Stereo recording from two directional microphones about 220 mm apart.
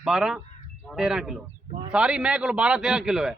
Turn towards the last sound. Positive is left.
turn(degrees=-5)  # may be behind; listen again after turning